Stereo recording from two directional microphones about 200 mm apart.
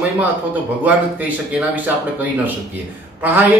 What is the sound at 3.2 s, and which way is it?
Speech, 10° right (ahead or behind).